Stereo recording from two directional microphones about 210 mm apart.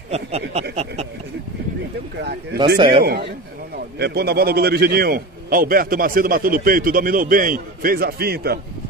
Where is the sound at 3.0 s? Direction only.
50° right (ahead or behind).